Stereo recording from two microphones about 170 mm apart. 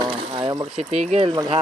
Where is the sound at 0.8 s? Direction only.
40° right (ahead or behind).